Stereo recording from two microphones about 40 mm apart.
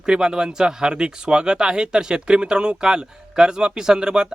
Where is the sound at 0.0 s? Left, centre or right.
Right.